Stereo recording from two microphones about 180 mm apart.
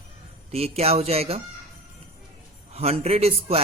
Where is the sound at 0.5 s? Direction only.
35° right (ahead or behind).